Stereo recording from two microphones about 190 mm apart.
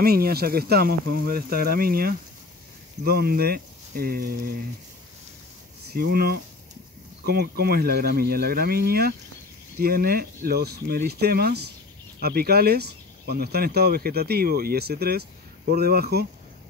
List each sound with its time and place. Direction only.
0.0 s speech: 55° right (ahead or behind)
5.9 s speech: 55° right (ahead or behind)